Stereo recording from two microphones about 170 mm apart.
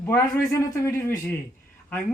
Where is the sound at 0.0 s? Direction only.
15° left (ahead or behind).